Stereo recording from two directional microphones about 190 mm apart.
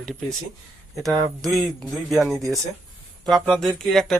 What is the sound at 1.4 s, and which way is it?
Speech, centre (ahead or behind).